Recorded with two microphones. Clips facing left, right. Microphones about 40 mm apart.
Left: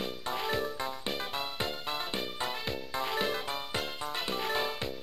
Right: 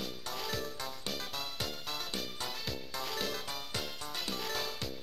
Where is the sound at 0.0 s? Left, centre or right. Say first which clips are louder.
Left 6 dB; left.